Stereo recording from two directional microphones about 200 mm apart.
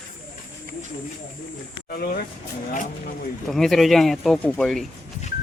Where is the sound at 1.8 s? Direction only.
45° left (ahead or behind).